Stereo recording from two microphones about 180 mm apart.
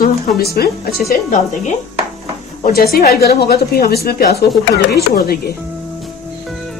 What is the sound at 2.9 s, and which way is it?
A woman's voice, 60° left (ahead or behind).